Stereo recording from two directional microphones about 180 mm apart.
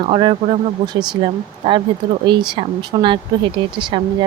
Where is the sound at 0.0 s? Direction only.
25° right (ahead or behind).